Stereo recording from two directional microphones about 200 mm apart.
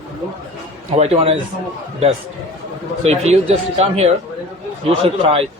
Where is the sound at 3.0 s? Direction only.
30° right (ahead or behind).